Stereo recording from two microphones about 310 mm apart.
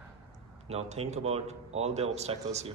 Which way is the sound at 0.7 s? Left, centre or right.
Right.